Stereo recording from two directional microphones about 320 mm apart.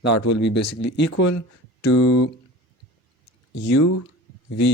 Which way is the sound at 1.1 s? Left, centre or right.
Left.